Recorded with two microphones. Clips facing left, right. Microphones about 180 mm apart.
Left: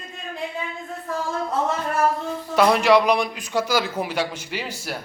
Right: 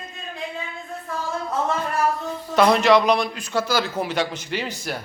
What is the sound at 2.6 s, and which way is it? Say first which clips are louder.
A man's voice: even; 10° left (ahead or behind).